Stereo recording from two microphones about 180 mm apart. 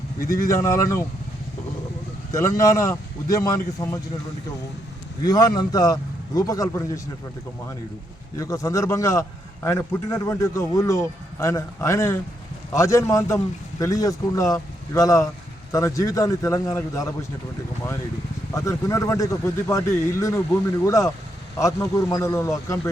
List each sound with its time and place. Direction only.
0.4 s a man's voice: 15° left (ahead or behind)
2.3 s a man's voice: 15° left (ahead or behind)
5.2 s a man's voice: 20° left (ahead or behind)
8.4 s a man's voice: 15° left (ahead or behind)
18.5 s a man's voice: 15° left (ahead or behind)